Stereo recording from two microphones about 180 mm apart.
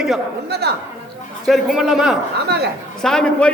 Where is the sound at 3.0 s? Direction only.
5° left (ahead or behind).